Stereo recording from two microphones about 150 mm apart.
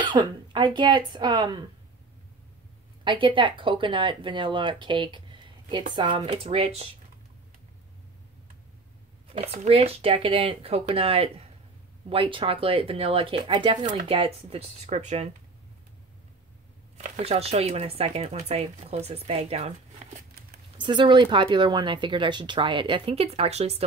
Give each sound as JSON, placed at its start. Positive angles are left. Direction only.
{"t": 0.0, "sound": "speech", "side_deg": -30}
{"t": 3.0, "sound": "speech", "side_deg": -35}
{"t": 9.3, "sound": "speech", "side_deg": -40}
{"t": 16.9, "sound": "speech", "side_deg": -45}
{"t": 20.8, "sound": "speech", "side_deg": -30}